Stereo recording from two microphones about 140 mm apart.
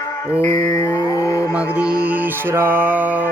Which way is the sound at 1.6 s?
10° right (ahead or behind).